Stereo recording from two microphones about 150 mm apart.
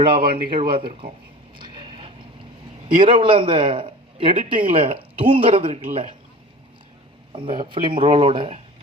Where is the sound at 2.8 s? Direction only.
35° right (ahead or behind).